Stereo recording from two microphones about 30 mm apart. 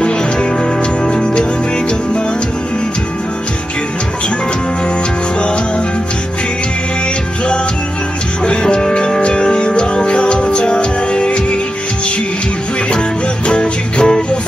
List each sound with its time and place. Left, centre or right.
8.5 s music: left
13.5 s music: left